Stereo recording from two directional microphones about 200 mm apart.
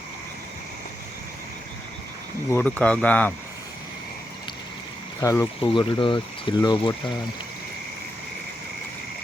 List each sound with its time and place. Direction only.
2.5 s speech: 10° left (ahead or behind)
5.2 s speech: 15° left (ahead or behind)